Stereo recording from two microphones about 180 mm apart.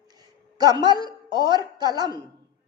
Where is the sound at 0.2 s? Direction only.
20° right (ahead or behind).